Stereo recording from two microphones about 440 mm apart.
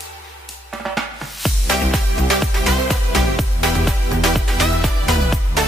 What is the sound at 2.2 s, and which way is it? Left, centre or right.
Music, centre.